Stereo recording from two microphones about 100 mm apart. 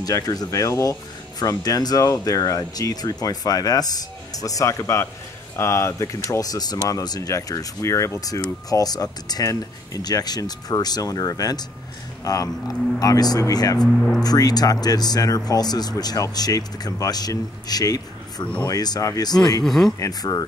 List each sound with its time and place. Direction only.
0.0 s speech: 40° left (ahead or behind)
19.6 s speech: 5° left (ahead or behind)
20.0 s speech: 40° left (ahead or behind)